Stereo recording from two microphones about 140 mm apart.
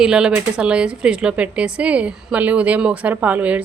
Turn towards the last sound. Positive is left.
turn(degrees=-10)  # may be behind; listen again after turning